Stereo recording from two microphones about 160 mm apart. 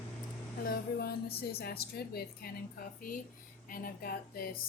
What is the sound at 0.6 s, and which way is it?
A woman's voice, 75° left (ahead or behind).